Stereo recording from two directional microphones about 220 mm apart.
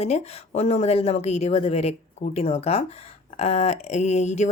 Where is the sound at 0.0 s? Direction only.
30° left (ahead or behind).